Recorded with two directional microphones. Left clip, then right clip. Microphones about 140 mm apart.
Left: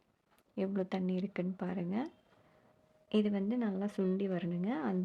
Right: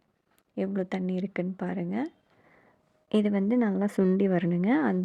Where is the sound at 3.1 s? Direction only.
45° right (ahead or behind).